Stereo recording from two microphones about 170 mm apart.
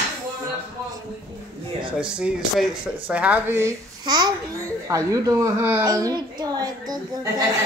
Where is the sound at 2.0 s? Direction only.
5° right (ahead or behind); by 7.3 s 25° right (ahead or behind).